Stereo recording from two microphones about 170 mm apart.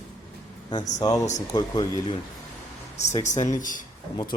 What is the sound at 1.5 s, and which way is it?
Speech, 25° left (ahead or behind).